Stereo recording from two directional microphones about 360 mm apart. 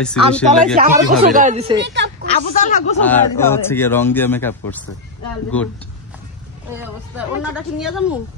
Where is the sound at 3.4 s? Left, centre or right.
Centre.